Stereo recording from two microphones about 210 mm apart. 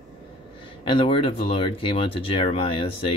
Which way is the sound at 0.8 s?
25° left (ahead or behind).